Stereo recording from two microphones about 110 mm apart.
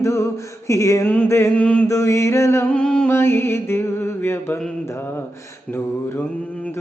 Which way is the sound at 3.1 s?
20° left (ahead or behind).